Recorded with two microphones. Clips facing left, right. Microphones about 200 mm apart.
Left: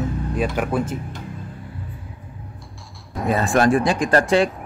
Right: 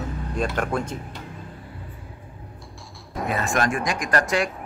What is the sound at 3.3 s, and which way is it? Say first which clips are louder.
Speech: left 7 dB; 35° left (ahead or behind).